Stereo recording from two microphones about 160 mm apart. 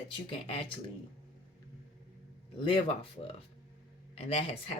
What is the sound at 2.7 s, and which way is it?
Speech, 35° left (ahead or behind).